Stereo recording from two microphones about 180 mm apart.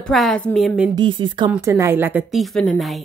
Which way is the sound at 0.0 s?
Centre (ahead or behind).